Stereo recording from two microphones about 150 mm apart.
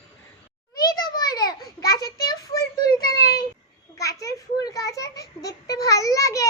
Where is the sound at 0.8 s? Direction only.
25° left (ahead or behind).